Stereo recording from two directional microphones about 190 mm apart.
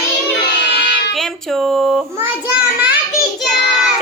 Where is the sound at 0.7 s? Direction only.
65° left (ahead or behind).